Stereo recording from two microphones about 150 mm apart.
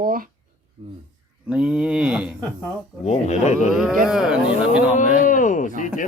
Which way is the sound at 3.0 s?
50° left (ahead or behind).